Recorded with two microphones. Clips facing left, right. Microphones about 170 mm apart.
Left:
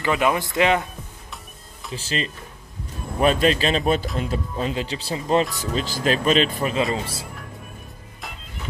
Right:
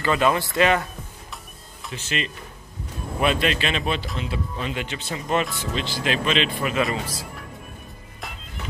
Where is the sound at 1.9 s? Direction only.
35° left (ahead or behind).